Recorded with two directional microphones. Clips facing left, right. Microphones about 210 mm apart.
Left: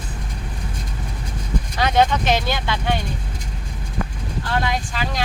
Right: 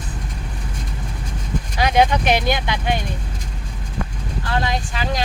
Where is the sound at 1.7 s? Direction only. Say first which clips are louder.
Right 1 dB; 15° right (ahead or behind).